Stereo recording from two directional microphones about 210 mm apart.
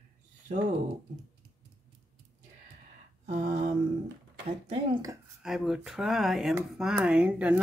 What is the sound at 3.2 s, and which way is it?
Mantra, 35° right (ahead or behind).